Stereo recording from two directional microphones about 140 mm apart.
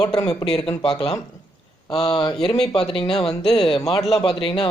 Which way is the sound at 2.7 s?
40° left (ahead or behind).